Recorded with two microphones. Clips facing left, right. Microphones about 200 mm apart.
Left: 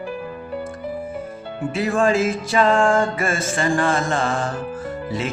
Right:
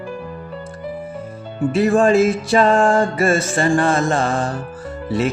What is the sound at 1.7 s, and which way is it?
Mantra, 30° right (ahead or behind).